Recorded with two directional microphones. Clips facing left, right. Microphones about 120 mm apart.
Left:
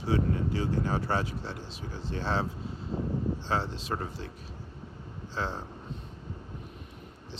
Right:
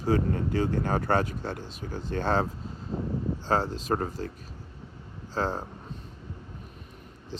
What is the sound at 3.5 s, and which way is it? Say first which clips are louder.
Speech: right 9 dB; 45° right (ahead or behind).